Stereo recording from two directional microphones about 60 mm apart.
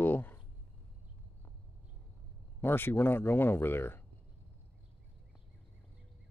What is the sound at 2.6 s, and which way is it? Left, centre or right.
Speech, left.